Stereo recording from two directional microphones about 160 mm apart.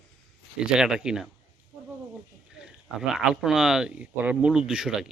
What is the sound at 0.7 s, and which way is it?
Speech, 5° right (ahead or behind).